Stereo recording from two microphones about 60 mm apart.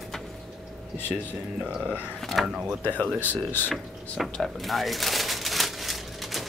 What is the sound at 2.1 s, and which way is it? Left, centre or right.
Speech, centre.